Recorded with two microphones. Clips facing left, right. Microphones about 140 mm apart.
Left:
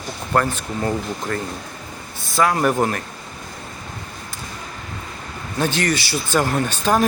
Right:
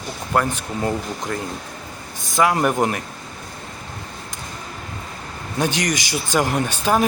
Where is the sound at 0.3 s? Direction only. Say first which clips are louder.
Left 1 dB; 10° right (ahead or behind).